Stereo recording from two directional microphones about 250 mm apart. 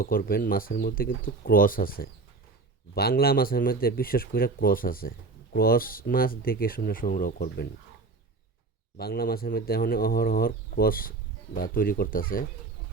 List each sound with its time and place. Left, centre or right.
0.0 s speech: left
9.0 s speech: left